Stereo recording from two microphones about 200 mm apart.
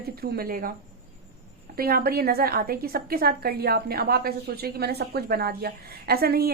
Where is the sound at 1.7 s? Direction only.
50° right (ahead or behind).